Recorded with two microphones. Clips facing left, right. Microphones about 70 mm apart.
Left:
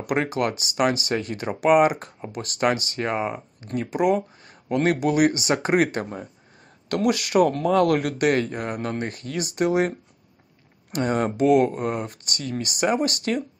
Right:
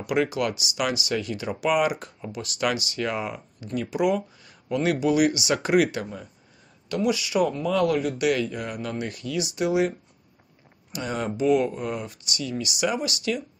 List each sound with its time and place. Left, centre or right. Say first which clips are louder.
0.0 s speech: left 1 dB; left
6.9 s speech: left 3 dB; left
8.3 s speech: left 2 dB; left